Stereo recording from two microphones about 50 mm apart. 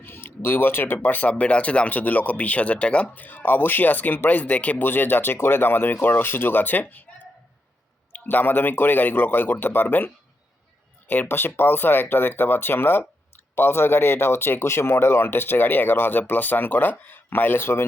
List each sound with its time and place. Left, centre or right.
0.0 s a sound: left
0.9 s speech: left
3.2 s speech: left
4.9 s speech: left
8.1 s speech: left
11.1 s speech: left